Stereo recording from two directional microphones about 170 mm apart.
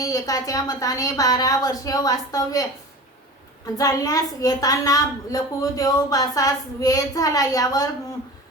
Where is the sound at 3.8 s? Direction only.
20° left (ahead or behind).